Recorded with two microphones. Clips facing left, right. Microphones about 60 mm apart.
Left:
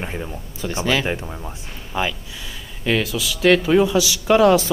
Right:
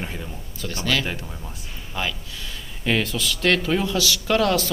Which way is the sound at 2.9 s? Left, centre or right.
Centre.